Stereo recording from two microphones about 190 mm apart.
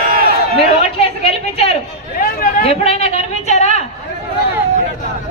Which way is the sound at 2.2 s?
50° left (ahead or behind).